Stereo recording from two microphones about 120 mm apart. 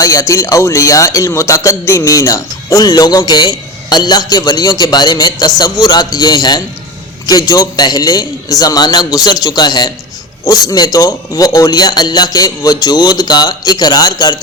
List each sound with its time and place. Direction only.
0.0 s speech: 25° left (ahead or behind)